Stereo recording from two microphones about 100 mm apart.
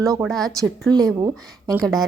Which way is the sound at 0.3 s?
Centre (ahead or behind).